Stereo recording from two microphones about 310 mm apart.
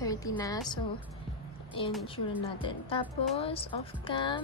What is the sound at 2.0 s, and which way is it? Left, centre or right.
Speech, centre.